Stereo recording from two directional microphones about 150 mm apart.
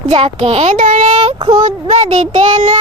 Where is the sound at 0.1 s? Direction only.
40° right (ahead or behind).